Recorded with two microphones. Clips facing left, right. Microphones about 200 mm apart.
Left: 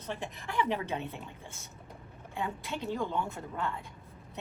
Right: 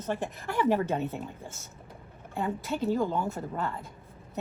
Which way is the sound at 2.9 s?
40° right (ahead or behind).